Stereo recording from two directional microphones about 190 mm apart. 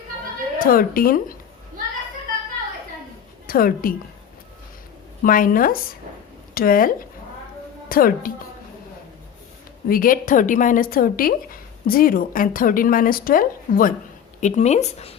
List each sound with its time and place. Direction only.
0.6 s a woman's voice: 50° left (ahead or behind)
3.4 s a woman's voice: 50° left (ahead or behind)
5.2 s a woman's voice: 45° left (ahead or behind)
9.9 s a woman's voice: 50° left (ahead or behind)
14.4 s speech: 35° left (ahead or behind)